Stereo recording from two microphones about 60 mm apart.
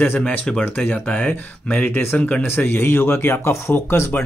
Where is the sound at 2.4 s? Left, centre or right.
Left.